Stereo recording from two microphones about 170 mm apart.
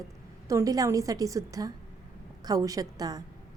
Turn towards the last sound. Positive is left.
turn(degrees=-20)  # may be behind; listen again after turning